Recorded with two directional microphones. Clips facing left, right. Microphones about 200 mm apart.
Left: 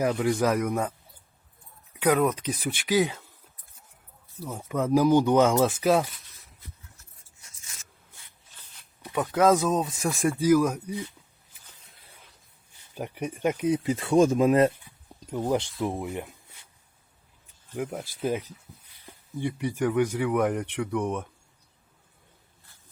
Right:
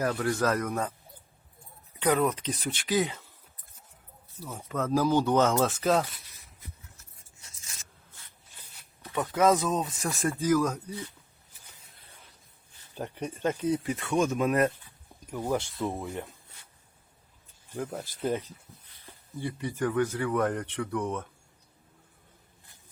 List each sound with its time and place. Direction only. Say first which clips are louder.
0.0 s speech: left 3 dB; 15° left (ahead or behind)
2.0 s speech: left 3 dB; 10° left (ahead or behind)
4.4 s speech: left 4 dB; 15° left (ahead or behind)
9.0 s a sound: left 3 dB; 15° left (ahead or behind)
9.3 s speech: left 3 dB; 10° left (ahead or behind)
12.9 s speech: left 2 dB; 10° left (ahead or behind); by 14.7 s 25° left (ahead or behind)
14.8 s a sound: left 4 dB; 20° left (ahead or behind)
15.8 s speech: left 3 dB; 20° left (ahead or behind)
17.7 s speech: left 3 dB; 10° left (ahead or behind)